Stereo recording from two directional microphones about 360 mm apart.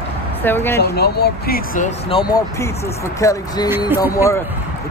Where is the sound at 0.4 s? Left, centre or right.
Centre.